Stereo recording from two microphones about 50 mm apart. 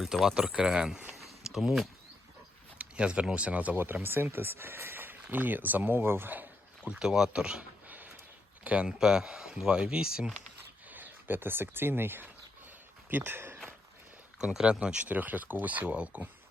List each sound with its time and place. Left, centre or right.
0.0 s speech: centre
0.3 s speech: centre
1.1 s a sound: centre
2.7 s speech: right
4.0 s speech: right
6.8 s speech: centre
7.9 s a sound: right
8.6 s speech: right
9.0 s speech: centre
10.8 s speech: right
14.5 s speech: centre
15.1 s speech: right